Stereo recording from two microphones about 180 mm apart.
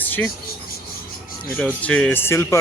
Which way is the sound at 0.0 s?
10° left (ahead or behind).